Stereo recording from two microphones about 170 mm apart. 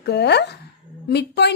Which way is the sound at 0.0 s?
80° left.